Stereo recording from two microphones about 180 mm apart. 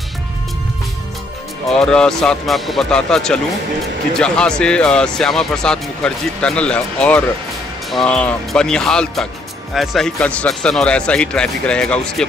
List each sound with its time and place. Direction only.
1.7 s speech: 5° left (ahead or behind)